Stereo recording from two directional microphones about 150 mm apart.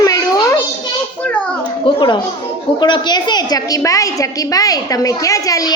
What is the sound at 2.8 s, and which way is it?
A woman's voice, 30° left (ahead or behind).